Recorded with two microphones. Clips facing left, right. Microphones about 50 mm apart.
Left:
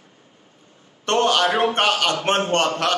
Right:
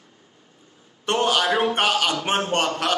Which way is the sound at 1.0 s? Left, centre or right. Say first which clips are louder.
Left 3 dB; centre.